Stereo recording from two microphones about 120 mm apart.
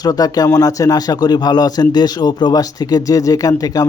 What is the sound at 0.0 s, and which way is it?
Speech, 30° left (ahead or behind).